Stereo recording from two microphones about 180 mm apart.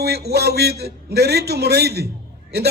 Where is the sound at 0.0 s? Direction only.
65° right (ahead or behind).